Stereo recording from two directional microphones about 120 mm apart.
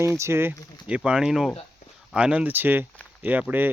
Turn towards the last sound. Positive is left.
turn(degrees=-15)  # may be behind; listen again after turning